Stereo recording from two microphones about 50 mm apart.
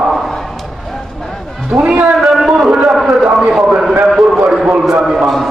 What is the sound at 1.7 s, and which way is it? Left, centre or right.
Speech, centre.